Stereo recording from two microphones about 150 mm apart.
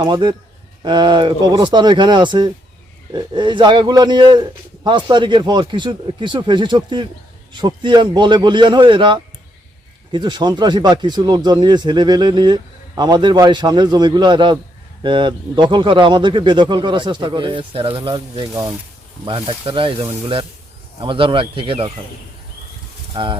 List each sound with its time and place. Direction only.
0.0 s a man's voice: 30° right (ahead or behind)
23.1 s a man's voice: 35° right (ahead or behind)